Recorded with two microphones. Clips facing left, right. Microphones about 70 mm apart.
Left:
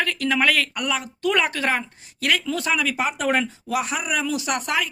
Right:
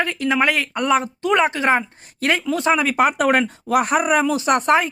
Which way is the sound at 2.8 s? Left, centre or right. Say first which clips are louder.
Right 6 dB; right.